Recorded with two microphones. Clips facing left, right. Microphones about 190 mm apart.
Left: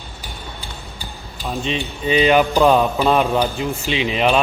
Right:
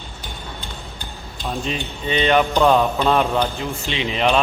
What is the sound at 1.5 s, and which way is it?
A man's voice, centre (ahead or behind).